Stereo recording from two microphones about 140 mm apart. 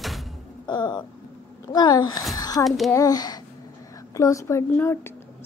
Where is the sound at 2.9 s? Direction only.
25° left (ahead or behind).